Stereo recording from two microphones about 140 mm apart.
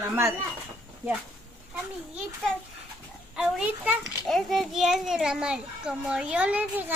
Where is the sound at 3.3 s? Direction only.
5° right (ahead or behind).